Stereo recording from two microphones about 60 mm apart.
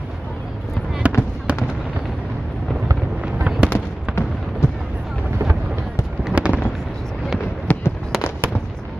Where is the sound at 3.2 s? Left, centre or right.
Right.